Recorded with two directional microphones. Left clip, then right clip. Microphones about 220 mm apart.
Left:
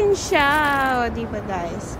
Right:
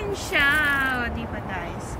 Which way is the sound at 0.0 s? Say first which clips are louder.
Left 5 dB; 15° left (ahead or behind).